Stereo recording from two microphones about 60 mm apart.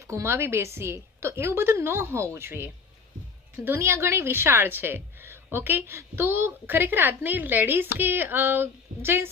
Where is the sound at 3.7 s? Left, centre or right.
Right.